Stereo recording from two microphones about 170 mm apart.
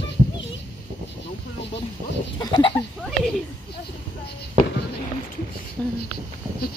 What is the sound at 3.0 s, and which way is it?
Speech, centre (ahead or behind).